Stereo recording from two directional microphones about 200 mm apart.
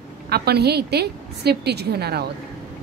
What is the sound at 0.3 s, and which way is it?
A woman's voice, 55° right (ahead or behind).